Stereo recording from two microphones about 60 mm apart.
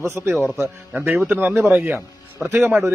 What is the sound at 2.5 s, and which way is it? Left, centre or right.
Speech, right.